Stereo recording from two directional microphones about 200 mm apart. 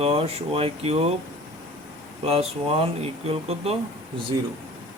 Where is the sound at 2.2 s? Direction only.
30° right (ahead or behind).